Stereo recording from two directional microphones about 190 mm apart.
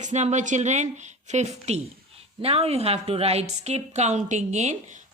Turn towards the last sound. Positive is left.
turn(degrees=-40)  # may be behind; listen again after turning